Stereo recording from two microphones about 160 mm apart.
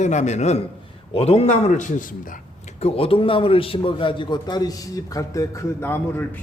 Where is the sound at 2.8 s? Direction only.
35° left (ahead or behind).